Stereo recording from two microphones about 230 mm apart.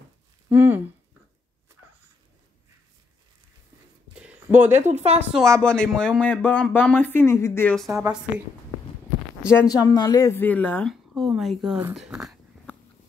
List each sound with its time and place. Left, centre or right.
0.5 s speech: centre
4.2 s a sound: centre
4.7 s a woman's voice: right
5.6 s speech: centre
7.9 s speech: centre
9.5 s speech: centre
12.1 s a sound: centre